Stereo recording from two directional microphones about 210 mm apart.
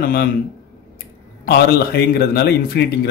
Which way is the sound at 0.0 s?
45° left (ahead or behind).